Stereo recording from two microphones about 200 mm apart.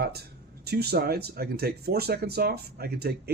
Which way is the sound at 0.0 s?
55° right (ahead or behind).